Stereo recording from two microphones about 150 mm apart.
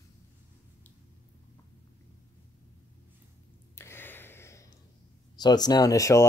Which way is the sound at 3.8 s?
15° left (ahead or behind).